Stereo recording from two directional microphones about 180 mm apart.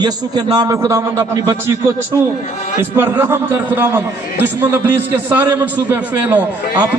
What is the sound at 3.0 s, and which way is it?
A man's voice, 10° right (ahead or behind).